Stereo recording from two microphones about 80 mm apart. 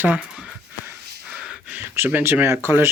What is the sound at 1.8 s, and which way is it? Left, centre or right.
Speech, right.